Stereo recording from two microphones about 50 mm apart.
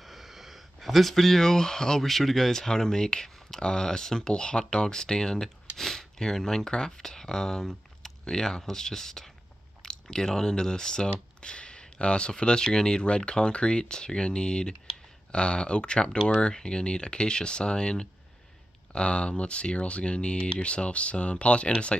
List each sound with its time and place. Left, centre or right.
0.0 s speech: centre; by 21.9 s left